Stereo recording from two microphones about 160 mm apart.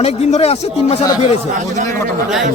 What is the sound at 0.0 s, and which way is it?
Speech, 40° left (ahead or behind).